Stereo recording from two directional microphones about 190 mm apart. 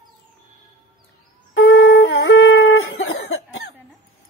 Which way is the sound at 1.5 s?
85° left.